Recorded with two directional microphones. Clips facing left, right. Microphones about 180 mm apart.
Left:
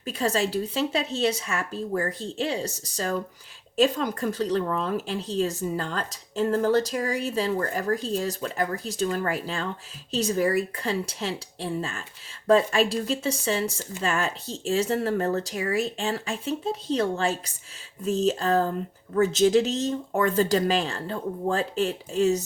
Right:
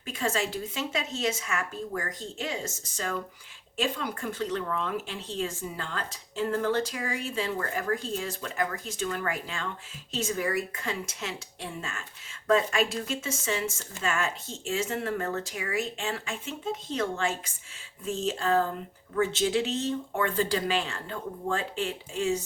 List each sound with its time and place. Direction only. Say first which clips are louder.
0.0 s speech: left 4 dB; 35° left (ahead or behind)